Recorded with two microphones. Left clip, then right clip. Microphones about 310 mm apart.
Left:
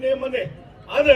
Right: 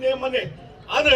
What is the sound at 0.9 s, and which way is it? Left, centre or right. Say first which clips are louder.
Speech: left 2 dB; centre.